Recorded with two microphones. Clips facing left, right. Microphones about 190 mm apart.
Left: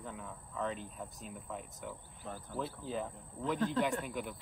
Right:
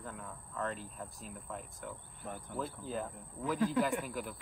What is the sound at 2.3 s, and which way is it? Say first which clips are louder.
Speech: right 1 dB; 20° right (ahead or behind).